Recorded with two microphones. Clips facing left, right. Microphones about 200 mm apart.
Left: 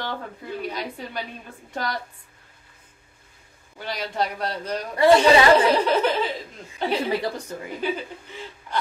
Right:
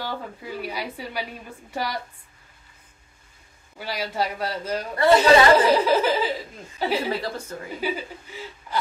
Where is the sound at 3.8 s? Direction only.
5° right (ahead or behind).